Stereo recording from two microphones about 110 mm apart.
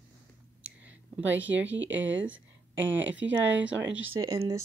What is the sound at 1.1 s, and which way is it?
Speech, 15° right (ahead or behind).